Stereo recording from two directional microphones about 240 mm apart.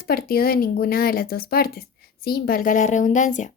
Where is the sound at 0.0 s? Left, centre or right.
Left.